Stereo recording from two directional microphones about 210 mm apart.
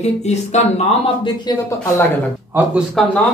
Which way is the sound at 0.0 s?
30° left (ahead or behind).